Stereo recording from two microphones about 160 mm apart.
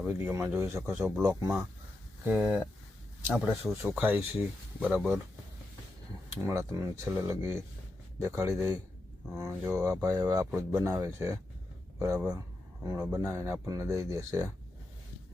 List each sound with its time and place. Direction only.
0.0 s speech: 15° right (ahead or behind)
6.4 s speech: 20° right (ahead or behind)